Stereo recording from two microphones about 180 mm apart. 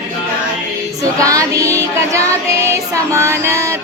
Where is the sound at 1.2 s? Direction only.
20° right (ahead or behind).